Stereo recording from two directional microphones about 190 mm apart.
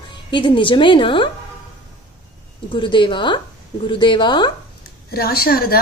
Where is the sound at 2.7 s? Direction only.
25° left (ahead or behind).